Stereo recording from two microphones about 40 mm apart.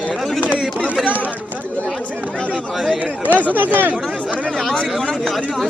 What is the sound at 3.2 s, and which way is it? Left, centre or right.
Speech, right.